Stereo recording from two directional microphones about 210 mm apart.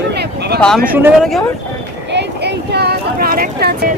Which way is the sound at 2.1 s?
50° right (ahead or behind).